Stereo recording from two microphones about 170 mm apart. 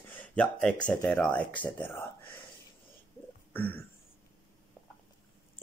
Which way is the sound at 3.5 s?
10° left (ahead or behind).